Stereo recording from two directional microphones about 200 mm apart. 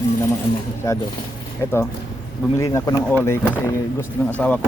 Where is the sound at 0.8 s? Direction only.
20° left (ahead or behind).